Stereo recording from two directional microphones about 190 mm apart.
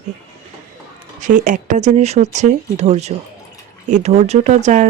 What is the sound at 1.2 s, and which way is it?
Speech, 40° right (ahead or behind).